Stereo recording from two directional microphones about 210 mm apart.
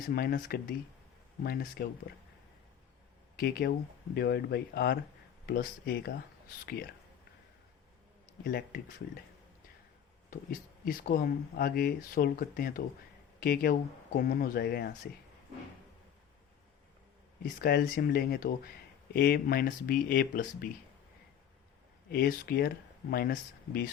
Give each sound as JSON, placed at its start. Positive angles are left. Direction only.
{"t": 0.1, "sound": "speech", "side_deg": 45}
{"t": 3.3, "sound": "speech", "side_deg": 45}
{"t": 8.4, "sound": "speech", "side_deg": 50}
{"t": 10.2, "sound": "speech", "side_deg": 40}
{"t": 17.6, "sound": "speech", "side_deg": 45}
{"t": 22.1, "sound": "speech", "side_deg": 45}